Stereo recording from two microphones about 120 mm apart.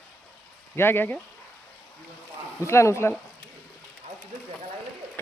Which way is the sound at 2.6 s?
25° left (ahead or behind).